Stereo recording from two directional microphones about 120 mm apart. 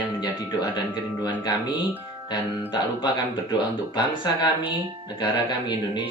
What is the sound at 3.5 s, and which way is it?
Speech, 35° left (ahead or behind).